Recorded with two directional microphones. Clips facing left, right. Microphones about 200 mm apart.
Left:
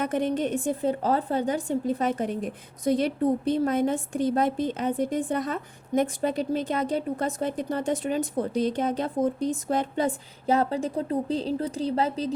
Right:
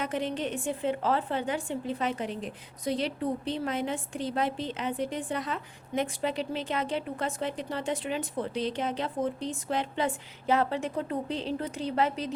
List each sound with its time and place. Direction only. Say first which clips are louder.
0.0 s a woman's voice: left 5 dB; 50° left (ahead or behind); by 12.3 s 35° left (ahead or behind)